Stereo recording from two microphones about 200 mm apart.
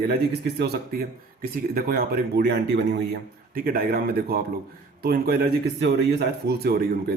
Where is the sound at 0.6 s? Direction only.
50° right (ahead or behind).